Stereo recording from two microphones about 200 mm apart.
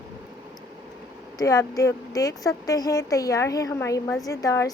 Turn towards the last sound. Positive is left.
turn(degrees=15)  # may be behind; listen again after turning